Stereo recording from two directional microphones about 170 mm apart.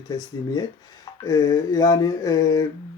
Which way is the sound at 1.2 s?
20° left (ahead or behind).